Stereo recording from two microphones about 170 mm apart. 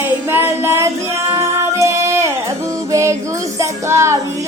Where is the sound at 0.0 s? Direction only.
15° right (ahead or behind).